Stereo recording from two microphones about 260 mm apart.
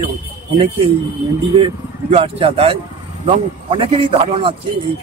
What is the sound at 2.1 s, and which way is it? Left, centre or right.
A man's voice, right.